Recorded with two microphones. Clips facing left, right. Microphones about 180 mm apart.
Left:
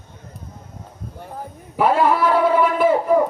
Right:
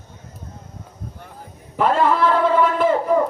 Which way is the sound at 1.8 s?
10° left (ahead or behind).